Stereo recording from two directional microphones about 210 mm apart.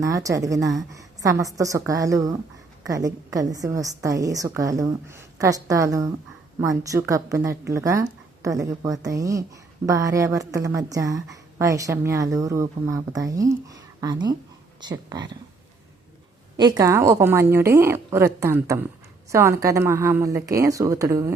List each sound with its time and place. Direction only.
0.0 s a woman's voice: 15° right (ahead or behind)
16.6 s a woman's voice: 20° right (ahead or behind)